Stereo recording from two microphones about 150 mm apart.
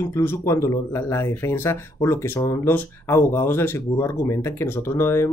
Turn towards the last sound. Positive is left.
turn(degrees=15)  # may be behind; listen again after turning